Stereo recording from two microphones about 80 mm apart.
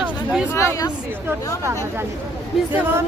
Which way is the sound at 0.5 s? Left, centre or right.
Left.